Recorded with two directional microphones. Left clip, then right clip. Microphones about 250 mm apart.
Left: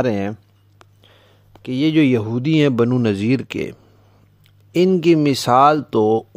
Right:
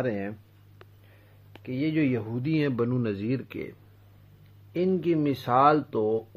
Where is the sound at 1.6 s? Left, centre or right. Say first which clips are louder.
Left 11 dB; left.